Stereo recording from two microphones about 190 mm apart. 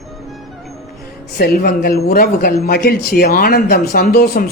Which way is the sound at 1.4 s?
50° left (ahead or behind).